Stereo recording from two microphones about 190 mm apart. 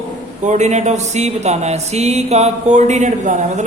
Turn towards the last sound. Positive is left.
turn(degrees=-40)  # may be behind; listen again after turning